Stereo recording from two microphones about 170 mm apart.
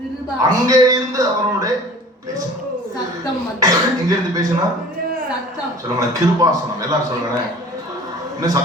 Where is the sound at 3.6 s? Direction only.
20° right (ahead or behind).